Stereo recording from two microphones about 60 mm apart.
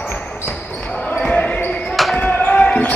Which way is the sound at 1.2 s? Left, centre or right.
Centre.